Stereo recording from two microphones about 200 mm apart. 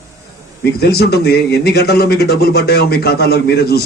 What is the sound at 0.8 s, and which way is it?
A man's voice, 55° left (ahead or behind).